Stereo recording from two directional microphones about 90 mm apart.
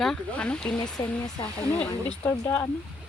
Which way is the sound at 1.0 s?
65° left (ahead or behind).